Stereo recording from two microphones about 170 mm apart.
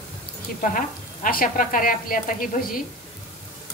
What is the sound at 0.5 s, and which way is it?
Speech, 50° left (ahead or behind).